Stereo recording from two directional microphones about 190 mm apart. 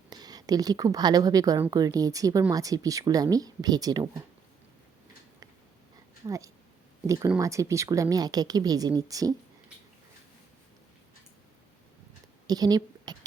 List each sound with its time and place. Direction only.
0.1 s a woman's voice: 20° right (ahead or behind)
6.2 s speech: 15° right (ahead or behind)
12.5 s a woman's voice: 20° right (ahead or behind)